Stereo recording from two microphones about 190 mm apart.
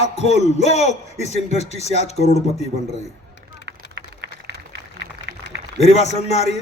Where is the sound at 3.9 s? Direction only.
65° right (ahead or behind).